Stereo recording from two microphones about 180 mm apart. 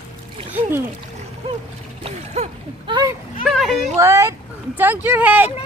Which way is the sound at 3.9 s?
15° right (ahead or behind).